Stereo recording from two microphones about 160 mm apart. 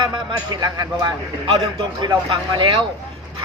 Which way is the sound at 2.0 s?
30° right (ahead or behind).